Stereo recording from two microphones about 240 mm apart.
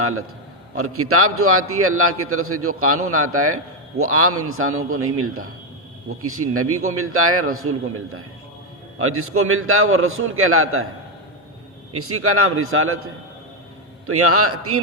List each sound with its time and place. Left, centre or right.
0.0 s a man's voice: right
11.9 s a man's voice: right
14.1 s a man's voice: right